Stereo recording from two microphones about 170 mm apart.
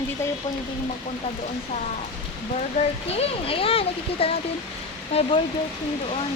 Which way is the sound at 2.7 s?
35° left (ahead or behind).